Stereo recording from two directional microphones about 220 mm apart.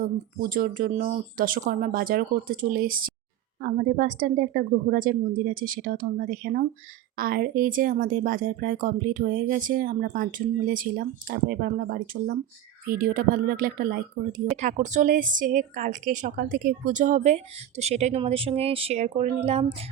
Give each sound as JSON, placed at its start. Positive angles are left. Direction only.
{"t": 0.0, "sound": "speech", "side_deg": -40}